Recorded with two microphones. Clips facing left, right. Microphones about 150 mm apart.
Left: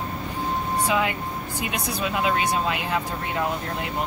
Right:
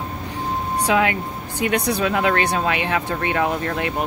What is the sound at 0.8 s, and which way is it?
Speech, 90° right.